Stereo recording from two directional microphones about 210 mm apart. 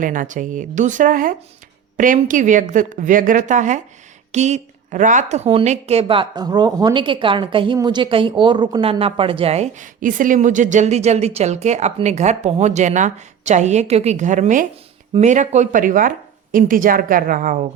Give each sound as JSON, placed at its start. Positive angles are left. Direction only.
{"t": 0.0, "sound": "speech", "side_deg": -40}